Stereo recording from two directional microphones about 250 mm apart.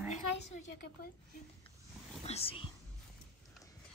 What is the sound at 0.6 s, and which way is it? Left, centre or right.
Speech, left.